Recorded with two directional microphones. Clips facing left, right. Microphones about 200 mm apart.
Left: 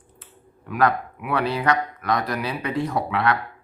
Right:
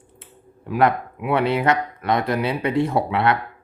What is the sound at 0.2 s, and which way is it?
Speech, 25° right (ahead or behind).